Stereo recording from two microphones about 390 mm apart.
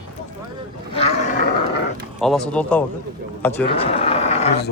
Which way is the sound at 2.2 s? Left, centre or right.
Centre.